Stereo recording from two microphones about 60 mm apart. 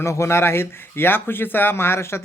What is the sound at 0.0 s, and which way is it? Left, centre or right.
Speech, left.